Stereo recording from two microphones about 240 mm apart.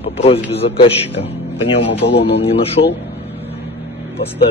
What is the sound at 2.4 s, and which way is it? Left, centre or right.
Speech, left.